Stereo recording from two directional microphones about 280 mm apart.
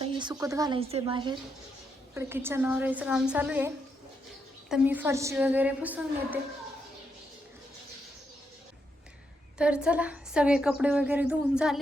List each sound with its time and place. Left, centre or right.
0.0 s a woman's voice: centre
4.7 s a woman's voice: centre
9.6 s a woman's voice: centre